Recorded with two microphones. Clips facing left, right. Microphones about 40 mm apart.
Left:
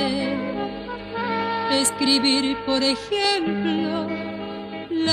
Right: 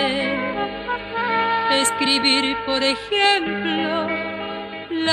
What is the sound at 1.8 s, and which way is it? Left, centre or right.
Music, right.